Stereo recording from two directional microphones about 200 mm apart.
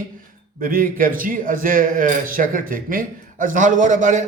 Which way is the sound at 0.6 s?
45° right (ahead or behind).